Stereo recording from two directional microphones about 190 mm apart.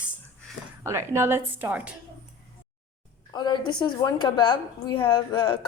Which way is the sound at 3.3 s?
25° left (ahead or behind).